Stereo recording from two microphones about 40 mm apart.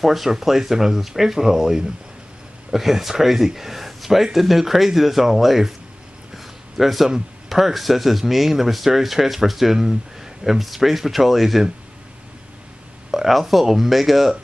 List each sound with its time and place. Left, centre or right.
0.0 s speech: centre
6.3 s a sound: centre
7.1 s speech: centre
13.1 s speech: centre